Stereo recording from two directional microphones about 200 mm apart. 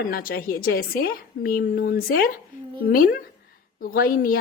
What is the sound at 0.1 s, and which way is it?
A woman's voice, 45° left (ahead or behind).